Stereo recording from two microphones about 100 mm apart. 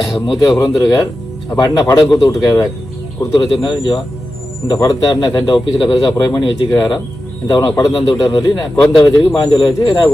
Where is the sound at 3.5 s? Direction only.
50° left (ahead or behind).